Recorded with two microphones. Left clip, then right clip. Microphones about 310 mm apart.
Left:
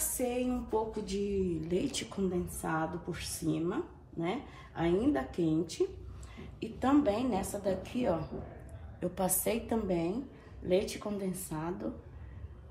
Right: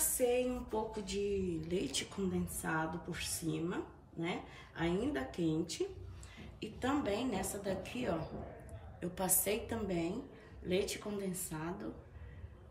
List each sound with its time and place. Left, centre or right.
0.0 s music: centre
0.9 s speech: centre